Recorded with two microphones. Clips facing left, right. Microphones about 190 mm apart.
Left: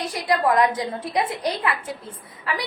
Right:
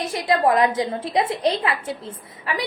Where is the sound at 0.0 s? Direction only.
25° right (ahead or behind).